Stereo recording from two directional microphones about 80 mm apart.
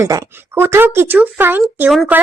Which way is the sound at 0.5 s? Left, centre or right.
Right.